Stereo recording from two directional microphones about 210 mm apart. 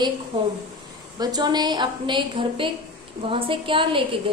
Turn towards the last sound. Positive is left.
turn(degrees=-25)  # may be behind; listen again after turning